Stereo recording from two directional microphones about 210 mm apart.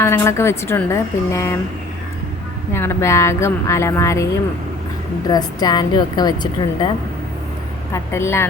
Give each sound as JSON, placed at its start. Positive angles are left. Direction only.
{"t": 0.0, "sound": "a woman's voice", "side_deg": 10}
{"t": 2.7, "sound": "a woman's voice", "side_deg": 10}
{"t": 5.3, "sound": "a woman's voice", "side_deg": 20}
{"t": 7.9, "sound": "a woman's voice", "side_deg": 10}